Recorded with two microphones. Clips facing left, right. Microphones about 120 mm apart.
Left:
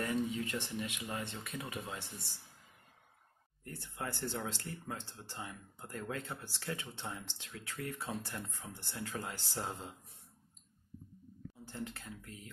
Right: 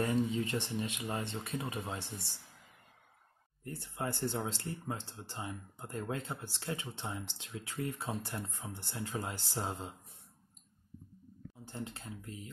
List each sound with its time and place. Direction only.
0.0 s speech: 25° right (ahead or behind)
3.6 s speech: 20° right (ahead or behind)
11.6 s speech: 25° right (ahead or behind)